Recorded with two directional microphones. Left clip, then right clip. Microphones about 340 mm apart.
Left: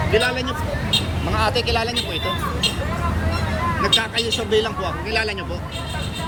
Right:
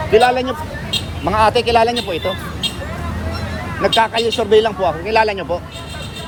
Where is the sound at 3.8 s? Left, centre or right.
Centre.